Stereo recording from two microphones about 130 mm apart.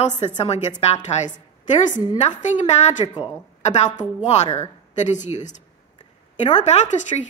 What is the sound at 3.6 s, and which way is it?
A woman's voice, 60° left (ahead or behind).